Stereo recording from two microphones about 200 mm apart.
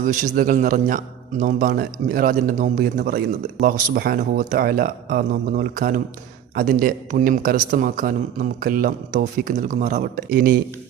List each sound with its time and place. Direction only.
0.0 s a man's voice: 40° right (ahead or behind)